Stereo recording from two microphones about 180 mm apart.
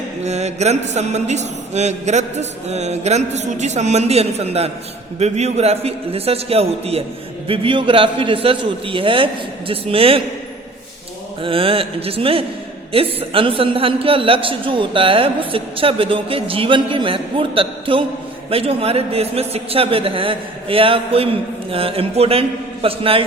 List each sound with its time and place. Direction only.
0.3 s mantra: 40° right (ahead or behind)
7.4 s a man's voice: 30° right (ahead or behind)
11.4 s mantra: 30° right (ahead or behind)
12.9 s a man's voice: 30° right (ahead or behind)
18.5 s mantra: 35° right (ahead or behind)